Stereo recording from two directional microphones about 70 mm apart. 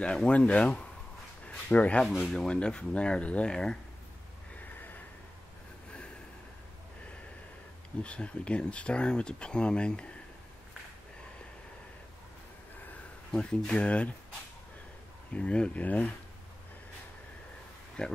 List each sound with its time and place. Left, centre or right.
0.0 s speech: centre
2.0 s speech: centre
4.6 s snort: left
8.0 s speech: centre
13.3 s speech: centre
15.3 s speech: centre
18.0 s speech: centre